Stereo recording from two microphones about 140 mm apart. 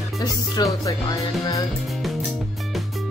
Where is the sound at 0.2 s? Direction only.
30° left (ahead or behind).